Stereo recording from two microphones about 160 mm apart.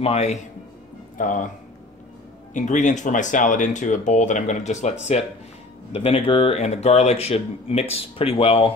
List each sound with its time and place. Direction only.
0.0 s speech: 45° left (ahead or behind)
1.1 s speech: 55° left (ahead or behind)
2.5 s speech: 50° left (ahead or behind)